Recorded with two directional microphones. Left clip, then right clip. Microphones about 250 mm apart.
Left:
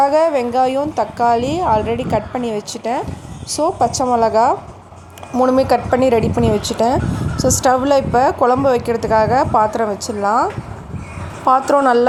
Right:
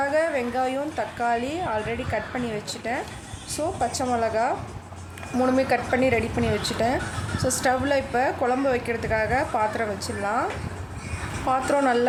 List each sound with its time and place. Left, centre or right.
0.0 s a woman's voice: left
11.4 s a woman's voice: left